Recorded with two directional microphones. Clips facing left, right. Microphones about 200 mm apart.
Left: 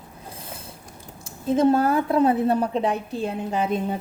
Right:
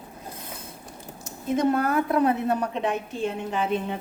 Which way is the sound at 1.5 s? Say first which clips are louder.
Left 4 dB; 30° left (ahead or behind).